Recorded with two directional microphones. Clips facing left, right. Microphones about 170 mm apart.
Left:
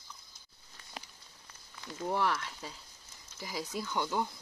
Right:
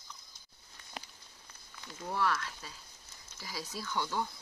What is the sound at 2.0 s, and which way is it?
Speech, 20° left (ahead or behind).